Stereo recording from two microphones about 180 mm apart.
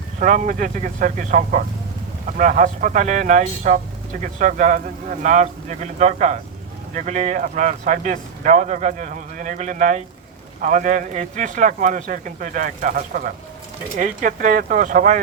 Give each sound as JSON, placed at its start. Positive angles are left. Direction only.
{"t": 0.2, "sound": "speech", "side_deg": -45}